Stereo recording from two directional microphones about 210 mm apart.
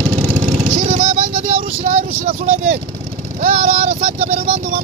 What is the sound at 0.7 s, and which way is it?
Vehicle, 35° right (ahead or behind).